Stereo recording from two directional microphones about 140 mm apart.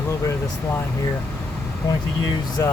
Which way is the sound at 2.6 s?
20° left (ahead or behind).